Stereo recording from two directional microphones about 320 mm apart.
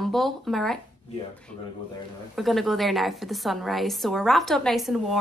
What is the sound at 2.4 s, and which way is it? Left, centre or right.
A woman's voice, centre.